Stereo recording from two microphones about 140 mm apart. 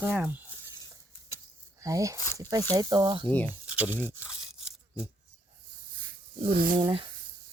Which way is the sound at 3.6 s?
10° right (ahead or behind).